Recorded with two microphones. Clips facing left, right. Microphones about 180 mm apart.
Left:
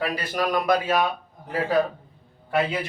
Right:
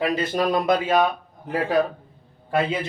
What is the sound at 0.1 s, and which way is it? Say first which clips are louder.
Speech: right 3 dB; 25° right (ahead or behind).